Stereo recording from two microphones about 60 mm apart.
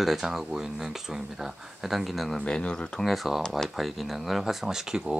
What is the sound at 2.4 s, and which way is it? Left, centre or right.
Speech, centre.